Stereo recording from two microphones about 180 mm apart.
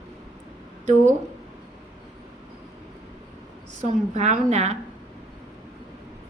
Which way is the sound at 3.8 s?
40° right (ahead or behind).